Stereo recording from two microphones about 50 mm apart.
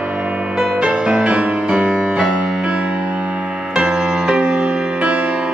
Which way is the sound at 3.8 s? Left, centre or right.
Centre.